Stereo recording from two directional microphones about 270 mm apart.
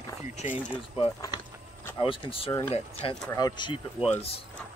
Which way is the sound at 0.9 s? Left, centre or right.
Centre.